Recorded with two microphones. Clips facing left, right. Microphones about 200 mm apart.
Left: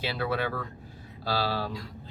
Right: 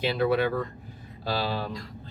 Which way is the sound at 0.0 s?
15° right (ahead or behind).